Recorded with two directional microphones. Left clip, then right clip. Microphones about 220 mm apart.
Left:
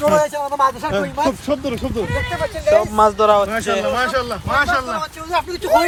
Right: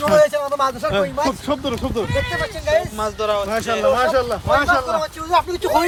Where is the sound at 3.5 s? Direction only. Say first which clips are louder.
Right 1 dB; 35° right (ahead or behind).